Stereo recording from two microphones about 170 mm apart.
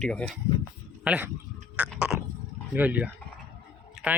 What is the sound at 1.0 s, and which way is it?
Speech, 5° right (ahead or behind).